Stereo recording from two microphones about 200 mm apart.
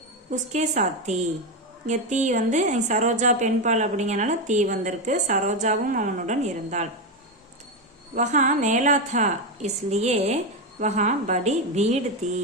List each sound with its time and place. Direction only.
0.3 s a woman's voice: 35° right (ahead or behind)
8.1 s a woman's voice: 40° right (ahead or behind)